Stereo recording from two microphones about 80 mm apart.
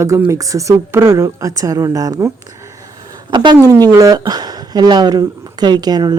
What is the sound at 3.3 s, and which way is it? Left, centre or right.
Speech, right.